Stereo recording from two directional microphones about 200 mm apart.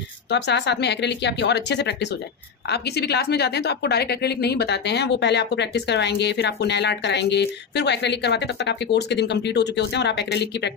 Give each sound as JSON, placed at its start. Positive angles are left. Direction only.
{"t": 0.3, "sound": "a woman's voice", "side_deg": 60}